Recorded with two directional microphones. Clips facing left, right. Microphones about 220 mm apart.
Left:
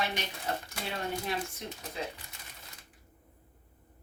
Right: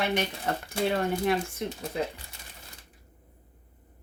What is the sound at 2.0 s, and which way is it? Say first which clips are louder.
Speech: right 7 dB; 60° right (ahead or behind).